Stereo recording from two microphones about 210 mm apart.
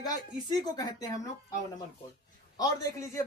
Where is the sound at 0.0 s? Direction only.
20° left (ahead or behind).